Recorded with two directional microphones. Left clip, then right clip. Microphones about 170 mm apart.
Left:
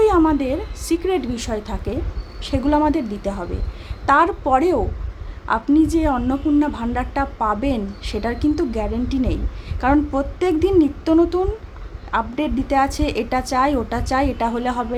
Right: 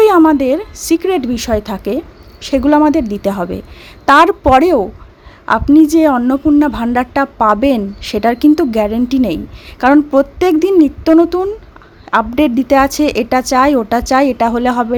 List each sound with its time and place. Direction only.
0.0 s a woman's voice: 45° right (ahead or behind)